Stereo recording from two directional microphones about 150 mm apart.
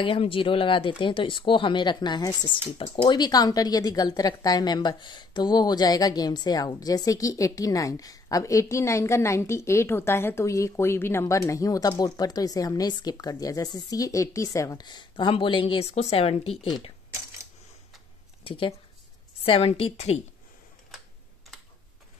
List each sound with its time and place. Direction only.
0.0 s speech: 35° left (ahead or behind)
18.4 s a woman's voice: 35° left (ahead or behind)